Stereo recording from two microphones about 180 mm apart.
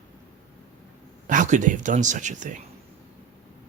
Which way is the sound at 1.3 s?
45° right (ahead or behind).